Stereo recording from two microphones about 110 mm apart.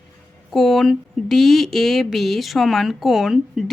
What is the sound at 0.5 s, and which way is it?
Speech, centre (ahead or behind).